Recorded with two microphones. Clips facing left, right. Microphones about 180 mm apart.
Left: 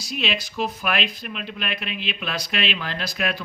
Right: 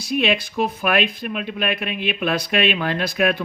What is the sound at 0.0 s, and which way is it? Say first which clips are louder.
Speech: right 7 dB; 55° right (ahead or behind).